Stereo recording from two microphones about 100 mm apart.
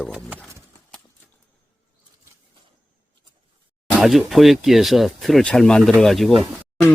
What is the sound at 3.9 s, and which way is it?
Speech, centre (ahead or behind).